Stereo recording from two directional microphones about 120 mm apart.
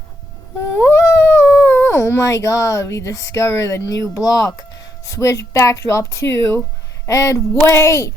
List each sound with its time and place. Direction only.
0.9 s speech: 20° left (ahead or behind)